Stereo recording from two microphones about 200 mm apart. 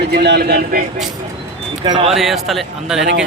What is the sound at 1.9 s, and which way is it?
Speech, 25° right (ahead or behind).